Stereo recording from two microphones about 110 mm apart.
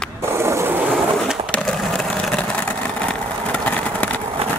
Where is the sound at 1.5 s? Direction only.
5° left (ahead or behind).